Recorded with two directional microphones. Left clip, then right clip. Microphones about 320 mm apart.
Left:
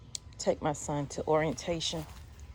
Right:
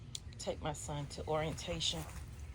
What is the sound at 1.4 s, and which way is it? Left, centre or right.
Speech, left.